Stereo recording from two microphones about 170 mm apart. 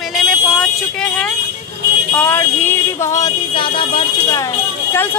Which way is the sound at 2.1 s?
10° left (ahead or behind).